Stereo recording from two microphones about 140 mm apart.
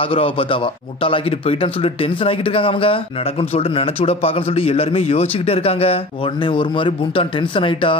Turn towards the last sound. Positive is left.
turn(degrees=40)  # may be behind; listen again after turning